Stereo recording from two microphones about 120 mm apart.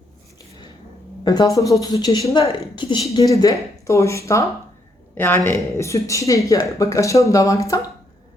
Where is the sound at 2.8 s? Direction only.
40° left (ahead or behind).